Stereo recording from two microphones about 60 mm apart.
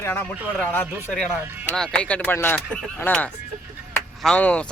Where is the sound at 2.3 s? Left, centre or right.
Left.